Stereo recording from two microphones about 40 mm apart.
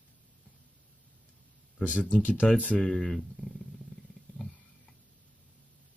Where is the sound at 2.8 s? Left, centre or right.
Centre.